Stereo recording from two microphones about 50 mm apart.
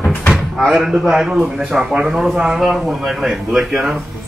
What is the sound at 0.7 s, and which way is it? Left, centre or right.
A man's voice, centre.